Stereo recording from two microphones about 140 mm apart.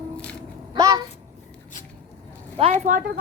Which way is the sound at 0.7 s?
25° right (ahead or behind).